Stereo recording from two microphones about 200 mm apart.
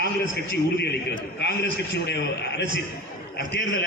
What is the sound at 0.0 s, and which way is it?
A man's voice, 55° left (ahead or behind).